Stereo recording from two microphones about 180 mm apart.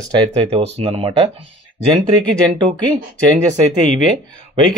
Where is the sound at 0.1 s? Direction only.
30° right (ahead or behind).